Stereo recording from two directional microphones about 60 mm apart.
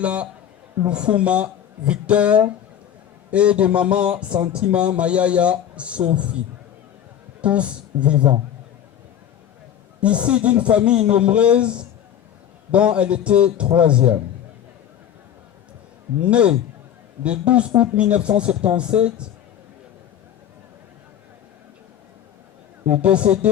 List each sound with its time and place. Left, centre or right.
0.0 s speech: right
7.4 s speech: centre
10.0 s speech: right
16.2 s speech: centre
22.9 s speech: centre